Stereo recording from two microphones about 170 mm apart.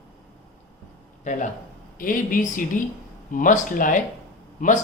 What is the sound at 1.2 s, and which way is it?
A man's voice, 50° left (ahead or behind).